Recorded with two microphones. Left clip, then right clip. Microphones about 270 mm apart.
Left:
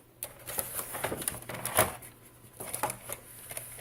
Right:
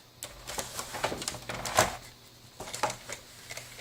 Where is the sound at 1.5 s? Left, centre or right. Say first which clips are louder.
Right 2 dB; centre.